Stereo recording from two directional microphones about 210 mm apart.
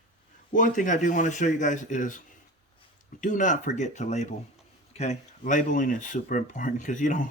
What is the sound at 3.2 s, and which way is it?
Speech, 35° left (ahead or behind).